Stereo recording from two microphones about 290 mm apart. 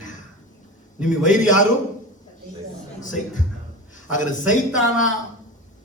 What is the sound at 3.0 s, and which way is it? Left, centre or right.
A man's voice, left.